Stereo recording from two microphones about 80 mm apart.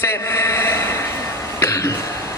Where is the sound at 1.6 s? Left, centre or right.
Left.